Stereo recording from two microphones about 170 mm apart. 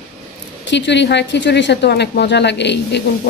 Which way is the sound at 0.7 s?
90° left.